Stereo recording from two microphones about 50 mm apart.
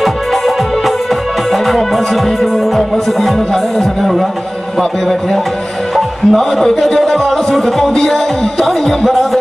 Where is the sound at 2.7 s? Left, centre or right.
Centre.